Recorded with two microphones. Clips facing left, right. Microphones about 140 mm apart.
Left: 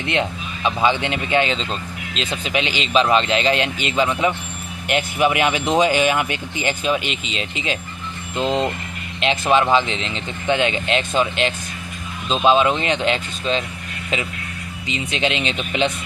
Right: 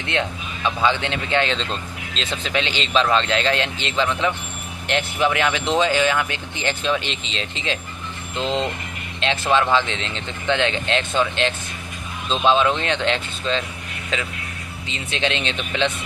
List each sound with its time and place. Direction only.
0.1 s speech: 15° left (ahead or behind)
14.8 s speech: 10° left (ahead or behind)